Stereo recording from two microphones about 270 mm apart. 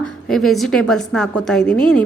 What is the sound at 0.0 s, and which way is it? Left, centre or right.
A woman's voice, centre.